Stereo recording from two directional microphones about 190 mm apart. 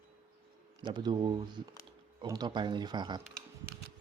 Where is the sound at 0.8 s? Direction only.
25° right (ahead or behind).